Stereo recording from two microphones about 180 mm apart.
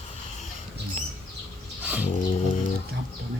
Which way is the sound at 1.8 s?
10° right (ahead or behind).